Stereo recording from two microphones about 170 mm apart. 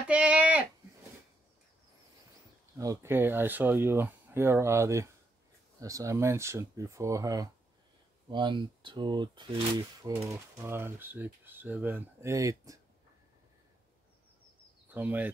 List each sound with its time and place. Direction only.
0.1 s a sound: 10° right (ahead or behind)
2.8 s speech: 15° right (ahead or behind)
14.9 s speech: 10° right (ahead or behind)